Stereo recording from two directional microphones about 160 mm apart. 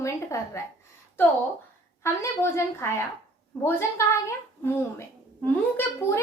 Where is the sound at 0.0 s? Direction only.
20° left (ahead or behind).